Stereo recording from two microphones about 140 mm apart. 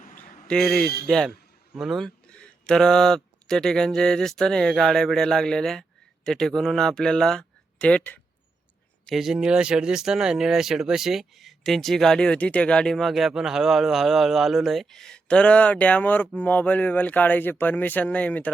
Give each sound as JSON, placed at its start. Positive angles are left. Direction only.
{"t": 0.2, "sound": "a sound", "side_deg": 5}
{"t": 1.0, "sound": "speech", "side_deg": 5}
{"t": 9.0, "sound": "speech", "side_deg": 0}